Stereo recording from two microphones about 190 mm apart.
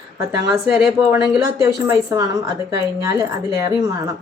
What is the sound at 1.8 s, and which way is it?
A woman's voice, 20° right (ahead or behind).